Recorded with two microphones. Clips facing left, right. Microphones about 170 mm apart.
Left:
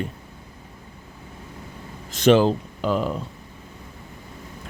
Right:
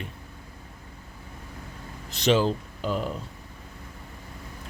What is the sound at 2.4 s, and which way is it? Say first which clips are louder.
Speech: left 5 dB; 90° left.